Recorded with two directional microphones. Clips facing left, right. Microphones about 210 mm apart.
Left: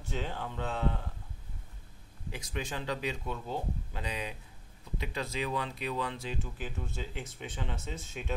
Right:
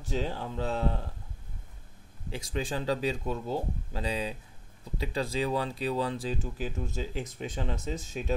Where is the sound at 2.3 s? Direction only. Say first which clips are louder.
Right 5 dB; 30° right (ahead or behind).